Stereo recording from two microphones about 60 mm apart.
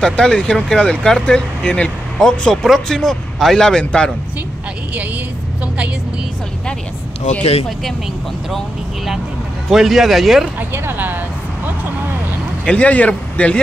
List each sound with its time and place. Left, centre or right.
0.0 s speech: centre
9.7 s speech: centre
10.7 s speech: right
12.6 s speech: left